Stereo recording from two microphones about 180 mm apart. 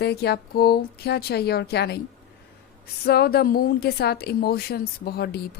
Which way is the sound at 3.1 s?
60° left (ahead or behind).